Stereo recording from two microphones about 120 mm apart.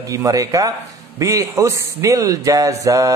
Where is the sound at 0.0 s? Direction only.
30° right (ahead or behind).